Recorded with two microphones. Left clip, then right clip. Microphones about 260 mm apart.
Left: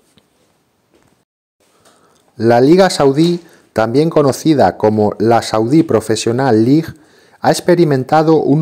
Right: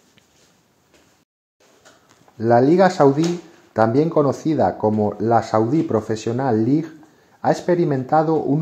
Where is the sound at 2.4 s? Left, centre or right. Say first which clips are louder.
Left 5 dB; left.